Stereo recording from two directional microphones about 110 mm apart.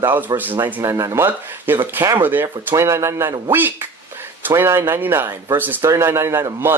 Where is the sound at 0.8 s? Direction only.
30° right (ahead or behind).